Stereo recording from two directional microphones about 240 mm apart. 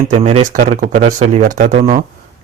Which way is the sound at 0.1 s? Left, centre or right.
Right.